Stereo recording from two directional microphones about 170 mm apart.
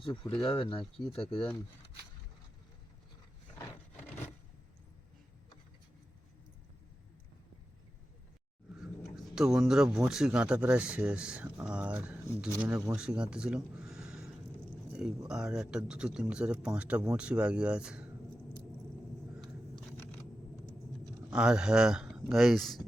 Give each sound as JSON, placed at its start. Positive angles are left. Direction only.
{"t": 0.0, "sound": "speech", "side_deg": 30}
{"t": 0.4, "sound": "speech", "side_deg": 0}
{"t": 8.7, "sound": "speech", "side_deg": 0}
{"t": 21.2, "sound": "speech", "side_deg": -5}